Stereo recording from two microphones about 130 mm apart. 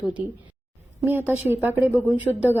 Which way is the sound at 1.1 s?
15° right (ahead or behind).